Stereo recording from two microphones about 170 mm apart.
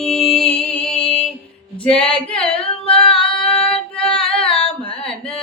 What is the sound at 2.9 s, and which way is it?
Female singing, 5° left (ahead or behind).